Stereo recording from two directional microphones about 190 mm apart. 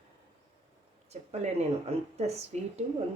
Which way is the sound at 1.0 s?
35° right (ahead or behind).